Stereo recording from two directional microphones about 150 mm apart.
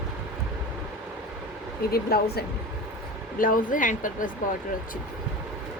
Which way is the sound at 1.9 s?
90° left.